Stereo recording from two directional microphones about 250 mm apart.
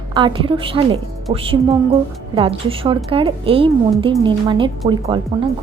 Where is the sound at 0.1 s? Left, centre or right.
Centre.